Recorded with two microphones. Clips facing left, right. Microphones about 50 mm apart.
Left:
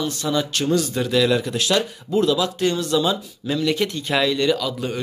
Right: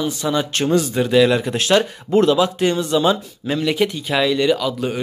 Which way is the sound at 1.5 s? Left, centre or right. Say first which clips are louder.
Right 4 dB; right.